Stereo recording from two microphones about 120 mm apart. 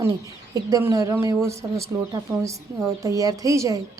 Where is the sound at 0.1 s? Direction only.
35° right (ahead or behind).